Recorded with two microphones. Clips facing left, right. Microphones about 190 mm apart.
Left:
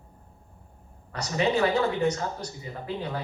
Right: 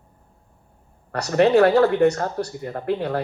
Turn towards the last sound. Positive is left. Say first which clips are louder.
# right 9 dB
turn(degrees=-65)  # may be behind; listen again after turning